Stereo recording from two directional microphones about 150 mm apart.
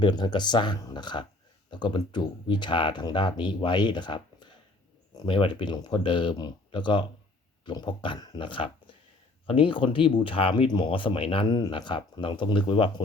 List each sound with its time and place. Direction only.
0.0 s speech: 30° left (ahead or behind)